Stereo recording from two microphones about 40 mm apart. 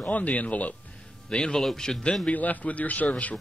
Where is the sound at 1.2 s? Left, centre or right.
Left.